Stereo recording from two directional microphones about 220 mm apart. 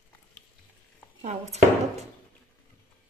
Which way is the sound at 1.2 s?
30° right (ahead or behind).